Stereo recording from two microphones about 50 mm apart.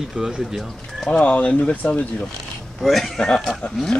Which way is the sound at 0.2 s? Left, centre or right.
Centre.